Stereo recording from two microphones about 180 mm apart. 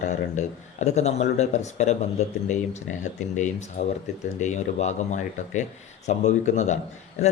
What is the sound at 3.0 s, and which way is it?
Speech, 40° left (ahead or behind).